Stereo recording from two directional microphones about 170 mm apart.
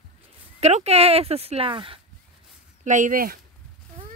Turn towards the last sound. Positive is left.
turn(degrees=-55)  # may be behind; listen again after turning